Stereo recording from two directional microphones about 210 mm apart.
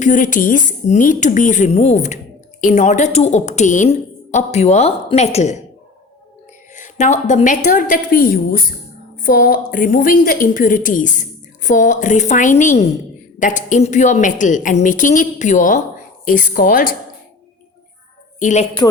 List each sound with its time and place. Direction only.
0.0 s a woman's voice: 40° left (ahead or behind)
6.7 s a woman's voice: 35° left (ahead or behind)
18.3 s a woman's voice: 35° left (ahead or behind)